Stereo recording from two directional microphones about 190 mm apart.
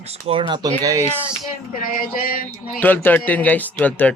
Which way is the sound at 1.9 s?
45° left (ahead or behind).